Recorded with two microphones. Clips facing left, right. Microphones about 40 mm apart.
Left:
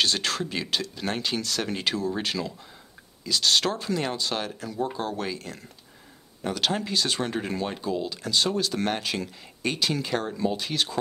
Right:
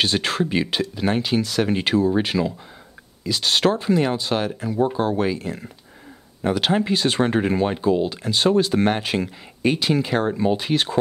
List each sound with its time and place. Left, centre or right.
0.0 s speech: right